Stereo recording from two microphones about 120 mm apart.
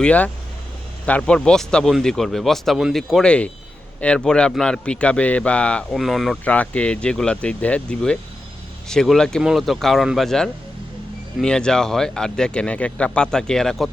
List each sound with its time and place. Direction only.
0.0 s a man's voice: 10° left (ahead or behind)
6.4 s a man's voice: 10° left (ahead or behind)